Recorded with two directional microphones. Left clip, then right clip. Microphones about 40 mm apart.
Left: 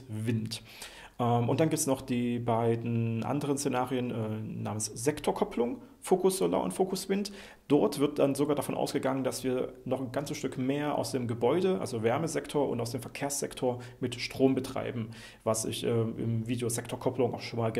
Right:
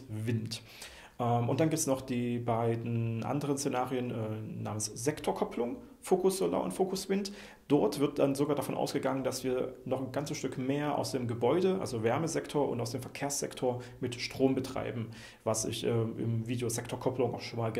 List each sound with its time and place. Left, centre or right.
0.2 s speech: left